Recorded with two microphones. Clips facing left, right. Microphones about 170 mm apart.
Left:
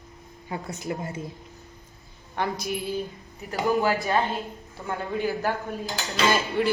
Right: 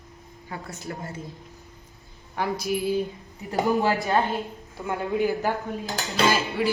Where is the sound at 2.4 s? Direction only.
5° right (ahead or behind).